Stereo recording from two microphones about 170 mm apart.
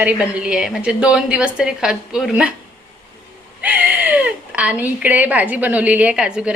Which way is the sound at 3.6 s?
10° right (ahead or behind).